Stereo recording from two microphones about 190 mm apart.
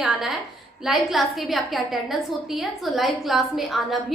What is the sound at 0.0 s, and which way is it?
A woman's voice, centre (ahead or behind).